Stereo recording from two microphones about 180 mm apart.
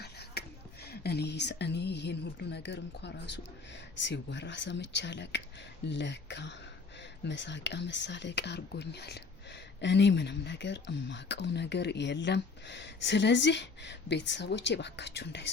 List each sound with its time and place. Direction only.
0.0 s a sound: 65° left (ahead or behind)
0.9 s speech: 65° left (ahead or behind)
9.8 s speech: 75° left (ahead or behind)